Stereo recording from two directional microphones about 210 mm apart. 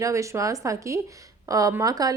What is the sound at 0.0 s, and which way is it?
Speech, 15° right (ahead or behind).